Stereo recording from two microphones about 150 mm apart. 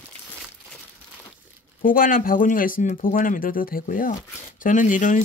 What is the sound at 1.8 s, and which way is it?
Speech, 70° left (ahead or behind).